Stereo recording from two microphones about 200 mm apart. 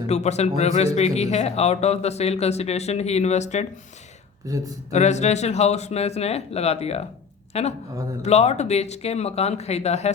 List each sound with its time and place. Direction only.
0.1 s speech: 35° left (ahead or behind)
4.4 s speech: 15° right (ahead or behind)
4.9 s speech: 35° left (ahead or behind)